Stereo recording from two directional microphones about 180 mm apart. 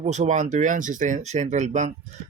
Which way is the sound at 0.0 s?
40° right (ahead or behind).